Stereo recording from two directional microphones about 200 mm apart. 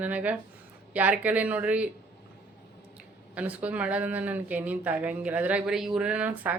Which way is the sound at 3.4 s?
5° right (ahead or behind).